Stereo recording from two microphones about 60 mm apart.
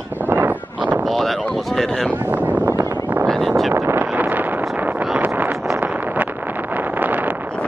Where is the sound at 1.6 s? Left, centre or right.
Centre.